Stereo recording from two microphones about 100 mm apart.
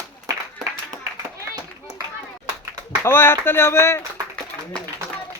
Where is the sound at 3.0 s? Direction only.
25° left (ahead or behind).